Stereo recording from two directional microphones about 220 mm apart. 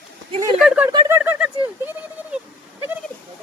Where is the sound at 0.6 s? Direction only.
5° right (ahead or behind).